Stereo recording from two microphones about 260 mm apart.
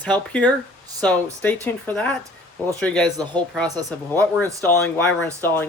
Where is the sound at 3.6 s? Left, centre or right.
Centre.